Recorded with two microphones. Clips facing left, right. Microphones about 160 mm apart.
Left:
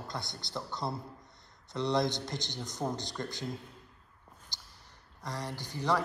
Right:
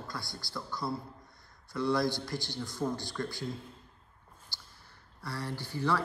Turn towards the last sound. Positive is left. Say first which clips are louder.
# even
turn(degrees=15)  # may be behind; listen again after turning